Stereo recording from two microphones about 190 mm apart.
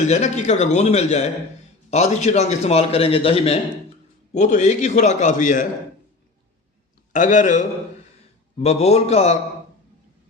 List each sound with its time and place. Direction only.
0.1 s a man's voice: 35° left (ahead or behind)
7.1 s a man's voice: 40° left (ahead or behind)